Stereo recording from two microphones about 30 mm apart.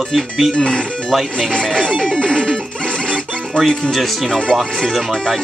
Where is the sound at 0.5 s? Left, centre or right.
Left.